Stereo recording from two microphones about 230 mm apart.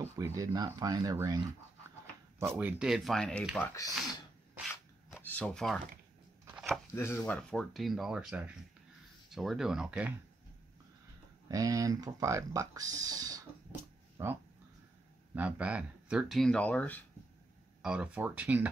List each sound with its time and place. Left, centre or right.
0.0 s speech: centre
5.1 s a sound: centre
6.4 s chopping: centre
7.0 s speech: centre
11.4 s speech: centre
15.3 s speech: centre
17.8 s speech: centre